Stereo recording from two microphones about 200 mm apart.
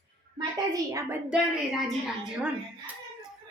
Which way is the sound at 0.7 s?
15° right (ahead or behind).